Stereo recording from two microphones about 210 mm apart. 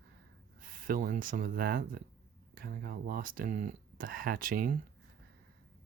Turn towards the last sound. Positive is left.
turn(degrees=-40)  # may be behind; listen again after turning